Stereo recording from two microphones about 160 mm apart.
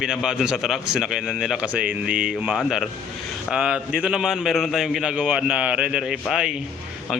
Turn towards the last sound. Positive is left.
turn(degrees=-5)  # may be behind; listen again after turning